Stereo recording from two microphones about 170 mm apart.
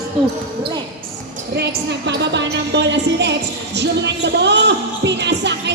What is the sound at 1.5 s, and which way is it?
A woman's voice, 90° right.